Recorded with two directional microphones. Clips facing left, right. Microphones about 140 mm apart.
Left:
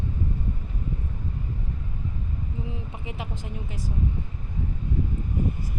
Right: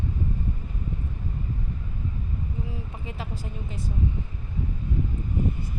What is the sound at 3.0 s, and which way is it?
Speech, 15° left (ahead or behind).